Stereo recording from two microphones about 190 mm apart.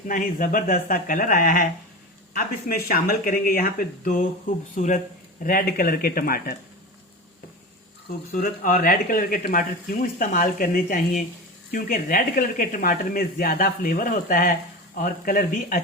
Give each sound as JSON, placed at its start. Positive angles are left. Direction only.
{"t": 0.1, "sound": "speech", "side_deg": 45}
{"t": 8.3, "sound": "speech", "side_deg": 45}